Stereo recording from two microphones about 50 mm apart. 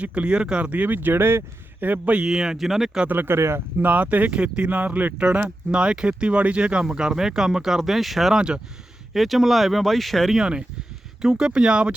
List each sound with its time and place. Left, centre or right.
0.0 s speech: right
0.9 s speech: right
1.8 s speech: right
2.2 s speech: centre
3.1 s speech: right
3.3 s speech: right
3.8 s speech: right
4.7 s speech: right
5.7 s speech: centre
8.4 s speech: centre
9.1 s speech: centre
11.2 s speech: centre